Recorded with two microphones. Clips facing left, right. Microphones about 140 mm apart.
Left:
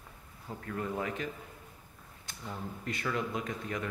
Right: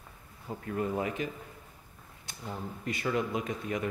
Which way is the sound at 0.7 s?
20° right (ahead or behind).